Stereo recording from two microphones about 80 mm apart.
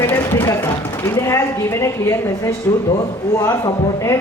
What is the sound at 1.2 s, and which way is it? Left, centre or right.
Speech, left.